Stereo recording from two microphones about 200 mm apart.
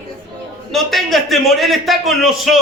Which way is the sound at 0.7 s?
Centre (ahead or behind).